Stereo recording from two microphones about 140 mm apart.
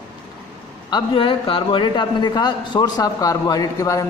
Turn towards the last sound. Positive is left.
turn(degrees=25)  # may be behind; listen again after turning